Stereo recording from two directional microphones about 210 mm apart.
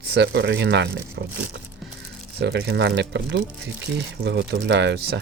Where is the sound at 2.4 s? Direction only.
50° right (ahead or behind).